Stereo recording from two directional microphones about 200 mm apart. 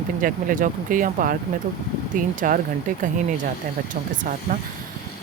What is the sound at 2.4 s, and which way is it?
Speech, 40° right (ahead or behind).